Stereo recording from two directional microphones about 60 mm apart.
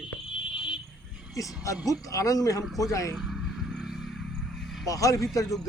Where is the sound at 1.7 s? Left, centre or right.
Left.